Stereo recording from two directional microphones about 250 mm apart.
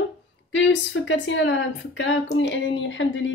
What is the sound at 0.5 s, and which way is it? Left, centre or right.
A woman's voice, left.